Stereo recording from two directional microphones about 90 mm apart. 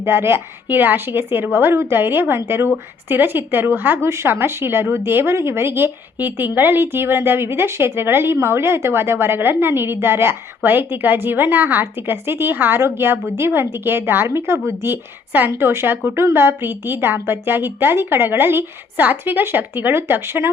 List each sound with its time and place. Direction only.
0.0 s a woman's voice: 25° right (ahead or behind)